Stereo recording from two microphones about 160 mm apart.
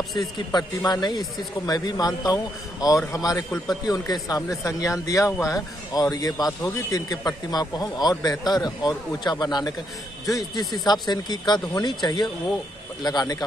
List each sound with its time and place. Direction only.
0.5 s a man's voice: 25° left (ahead or behind)